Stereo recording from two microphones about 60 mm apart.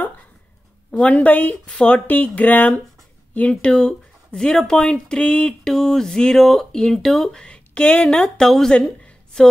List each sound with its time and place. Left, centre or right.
0.9 s speech: left
5.7 s speech: centre
7.3 s speech: centre
8.7 s a sound: centre